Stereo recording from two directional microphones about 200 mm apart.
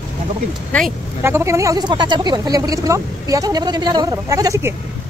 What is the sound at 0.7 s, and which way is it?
Speech, 5° left (ahead or behind).